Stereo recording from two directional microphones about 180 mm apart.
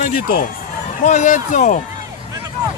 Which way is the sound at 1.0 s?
45° left (ahead or behind).